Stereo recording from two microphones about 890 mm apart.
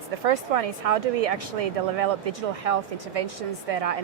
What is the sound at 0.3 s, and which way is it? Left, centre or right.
Speech, right.